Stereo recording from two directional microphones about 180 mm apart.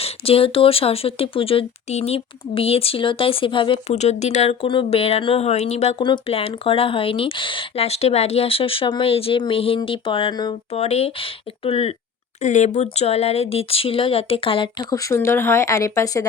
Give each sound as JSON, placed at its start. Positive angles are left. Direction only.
{"t": 0.0, "sound": "speech", "side_deg": 30}
{"t": 10.7, "sound": "speech", "side_deg": 35}